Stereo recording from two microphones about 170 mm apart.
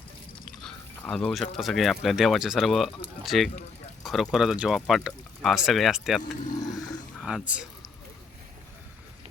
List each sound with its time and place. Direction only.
0.4 s speech: 5° left (ahead or behind)
6.6 s a sound: 20° left (ahead or behind)
7.2 s speech: 5° right (ahead or behind)